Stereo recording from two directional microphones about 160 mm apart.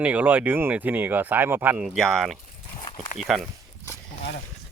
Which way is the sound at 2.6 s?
30° left (ahead or behind).